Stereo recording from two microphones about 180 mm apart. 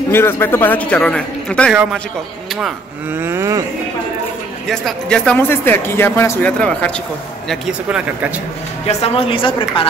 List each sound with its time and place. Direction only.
0.1 s speech: 10° left (ahead or behind)
3.2 s a sound: 15° right (ahead or behind)
4.6 s speech: 5° left (ahead or behind)
7.4 s speech: 5° right (ahead or behind)
8.8 s a woman's voice: 35° left (ahead or behind)